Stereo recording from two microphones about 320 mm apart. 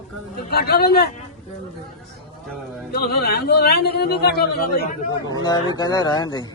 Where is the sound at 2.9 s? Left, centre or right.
Left.